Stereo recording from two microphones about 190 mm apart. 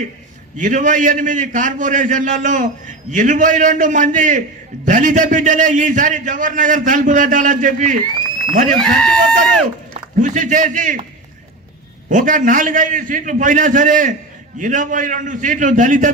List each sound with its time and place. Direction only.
0.6 s a man's voice: 40° right (ahead or behind)
8.7 s speech: 5° left (ahead or behind)
9.9 s a man's voice: 40° right (ahead or behind)
12.0 s a man's voice: 45° right (ahead or behind)